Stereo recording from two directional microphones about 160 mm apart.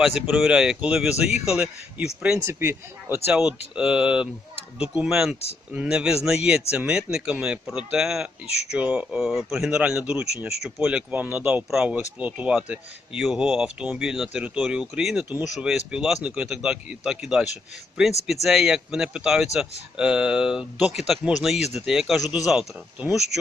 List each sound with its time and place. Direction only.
0.0 s speech: 5° right (ahead or behind)
3.2 s speech: 5° right (ahead or behind)